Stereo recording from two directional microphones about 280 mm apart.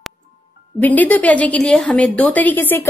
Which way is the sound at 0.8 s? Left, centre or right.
Centre.